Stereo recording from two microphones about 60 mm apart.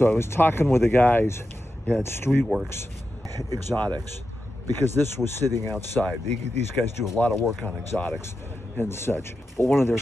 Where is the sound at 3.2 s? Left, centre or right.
Right.